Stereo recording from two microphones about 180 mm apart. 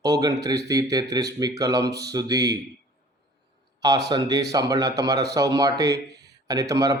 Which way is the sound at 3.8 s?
20° right (ahead or behind).